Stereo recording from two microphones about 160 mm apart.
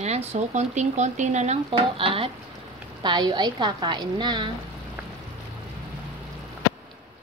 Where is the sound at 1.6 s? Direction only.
35° right (ahead or behind).